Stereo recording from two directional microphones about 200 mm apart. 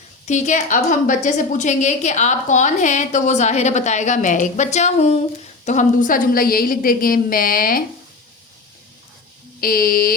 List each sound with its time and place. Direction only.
0.3 s a woman's voice: 35° left (ahead or behind)
9.6 s a woman's voice: 45° left (ahead or behind)